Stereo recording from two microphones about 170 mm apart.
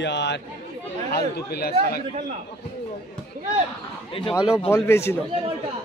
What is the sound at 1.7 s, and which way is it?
Speech, 45° right (ahead or behind).